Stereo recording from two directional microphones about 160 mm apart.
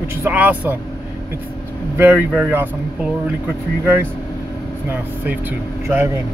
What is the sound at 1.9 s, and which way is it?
Speech, 10° right (ahead or behind).